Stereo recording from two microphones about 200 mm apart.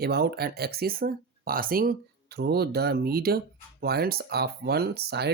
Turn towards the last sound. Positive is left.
turn(degrees=-55)  # may be behind; listen again after turning